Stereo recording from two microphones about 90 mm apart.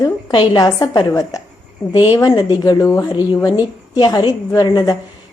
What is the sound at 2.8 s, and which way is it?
Speech, 30° left (ahead or behind).